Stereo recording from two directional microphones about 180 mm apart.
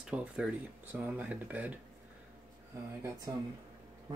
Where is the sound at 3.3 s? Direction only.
20° right (ahead or behind).